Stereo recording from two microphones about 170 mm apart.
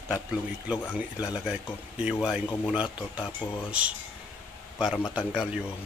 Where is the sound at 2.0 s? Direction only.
5° right (ahead or behind).